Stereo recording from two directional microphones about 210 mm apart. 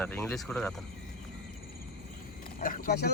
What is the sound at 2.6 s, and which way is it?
Speech, 45° left (ahead or behind).